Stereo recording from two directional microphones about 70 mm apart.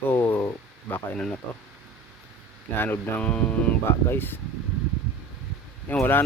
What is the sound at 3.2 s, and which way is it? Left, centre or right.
Speech, centre.